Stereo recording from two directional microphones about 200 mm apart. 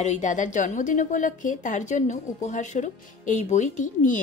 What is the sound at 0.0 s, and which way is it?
Speech, 35° left (ahead or behind).